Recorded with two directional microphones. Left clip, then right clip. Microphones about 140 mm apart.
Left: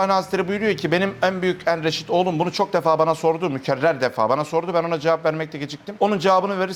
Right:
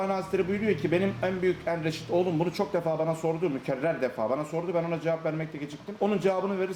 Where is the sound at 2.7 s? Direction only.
15° right (ahead or behind).